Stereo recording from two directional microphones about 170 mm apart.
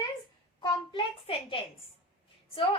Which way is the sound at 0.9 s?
30° left (ahead or behind).